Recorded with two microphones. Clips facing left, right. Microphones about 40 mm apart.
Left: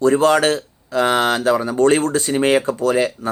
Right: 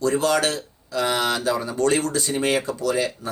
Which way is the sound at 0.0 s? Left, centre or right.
Left.